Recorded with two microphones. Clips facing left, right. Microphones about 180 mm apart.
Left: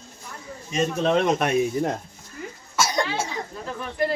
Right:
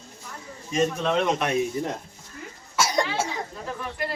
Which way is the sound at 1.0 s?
40° left (ahead or behind).